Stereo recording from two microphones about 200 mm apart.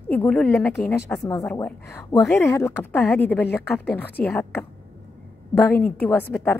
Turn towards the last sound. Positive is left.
turn(degrees=10)  # may be behind; listen again after turning